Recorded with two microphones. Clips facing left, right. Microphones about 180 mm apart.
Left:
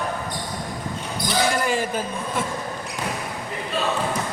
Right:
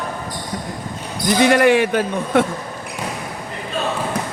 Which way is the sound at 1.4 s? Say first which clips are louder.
Right 11 dB; 70° right (ahead or behind).